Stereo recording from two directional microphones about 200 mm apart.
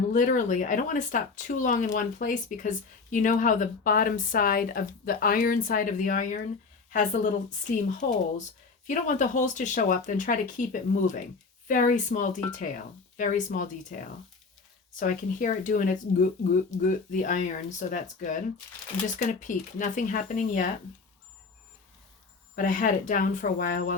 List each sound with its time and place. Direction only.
0.1 s speech: 40° left (ahead or behind)
22.5 s speech: 40° left (ahead or behind)